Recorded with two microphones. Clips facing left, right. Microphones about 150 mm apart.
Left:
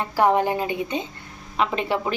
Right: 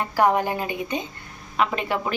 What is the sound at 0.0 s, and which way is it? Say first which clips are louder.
A woman's voice: left 1 dB; 25° left (ahead or behind).